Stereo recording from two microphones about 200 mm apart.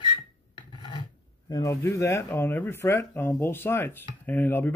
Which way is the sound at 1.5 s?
15° left (ahead or behind).